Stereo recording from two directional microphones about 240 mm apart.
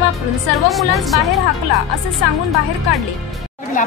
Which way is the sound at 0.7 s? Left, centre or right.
Centre.